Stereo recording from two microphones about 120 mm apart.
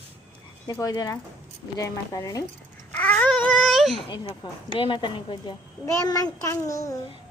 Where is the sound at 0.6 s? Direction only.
30° left (ahead or behind).